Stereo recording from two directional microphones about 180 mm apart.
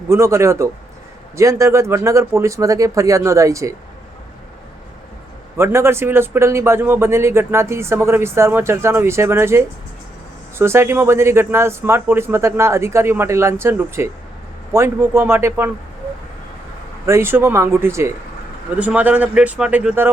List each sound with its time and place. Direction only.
0.1 s a man's voice: 15° right (ahead or behind)
5.5 s a man's voice: 15° right (ahead or behind)
17.1 s a man's voice: 15° right (ahead or behind)